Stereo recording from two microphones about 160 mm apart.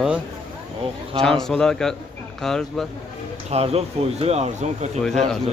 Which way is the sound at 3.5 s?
40° right (ahead or behind).